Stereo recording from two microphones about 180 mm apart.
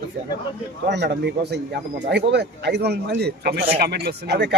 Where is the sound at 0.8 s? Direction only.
70° right (ahead or behind).